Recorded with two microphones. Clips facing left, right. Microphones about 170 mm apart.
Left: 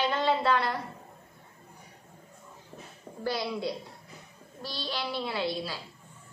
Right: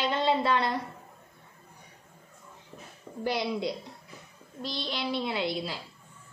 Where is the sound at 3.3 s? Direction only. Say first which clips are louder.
Right 2 dB; 20° right (ahead or behind).